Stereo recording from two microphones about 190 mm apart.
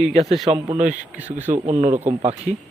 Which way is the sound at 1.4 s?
35° right (ahead or behind).